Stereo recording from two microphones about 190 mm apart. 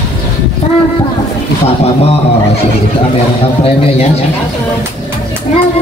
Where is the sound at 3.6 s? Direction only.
30° left (ahead or behind).